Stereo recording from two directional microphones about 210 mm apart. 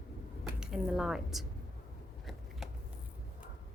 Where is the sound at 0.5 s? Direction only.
5° right (ahead or behind).